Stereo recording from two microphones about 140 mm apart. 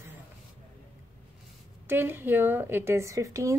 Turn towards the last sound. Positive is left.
turn(degrees=-20)  # may be behind; listen again after turning